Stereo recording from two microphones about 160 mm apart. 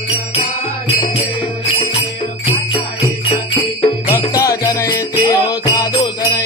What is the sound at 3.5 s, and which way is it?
Music, 20° left (ahead or behind).